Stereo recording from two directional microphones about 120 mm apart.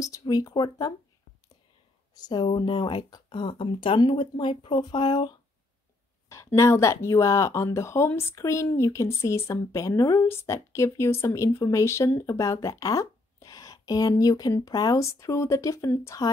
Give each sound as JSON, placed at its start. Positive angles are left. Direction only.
{"t": 0.0, "sound": "speech", "side_deg": 30}
{"t": 2.1, "sound": "speech", "side_deg": 35}
{"t": 6.2, "sound": "speech", "side_deg": 25}